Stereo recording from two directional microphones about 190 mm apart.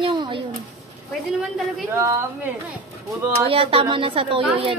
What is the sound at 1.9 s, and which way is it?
Speech, 15° right (ahead or behind).